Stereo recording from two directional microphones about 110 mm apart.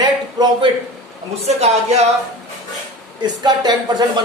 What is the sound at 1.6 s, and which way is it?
Speech, 80° right.